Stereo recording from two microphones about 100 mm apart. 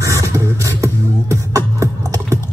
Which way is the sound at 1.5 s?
35° right (ahead or behind).